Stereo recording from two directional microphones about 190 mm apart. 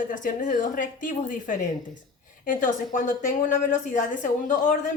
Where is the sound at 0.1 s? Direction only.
45° left (ahead or behind).